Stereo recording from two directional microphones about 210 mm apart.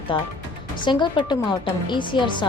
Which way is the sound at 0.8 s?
20° left (ahead or behind).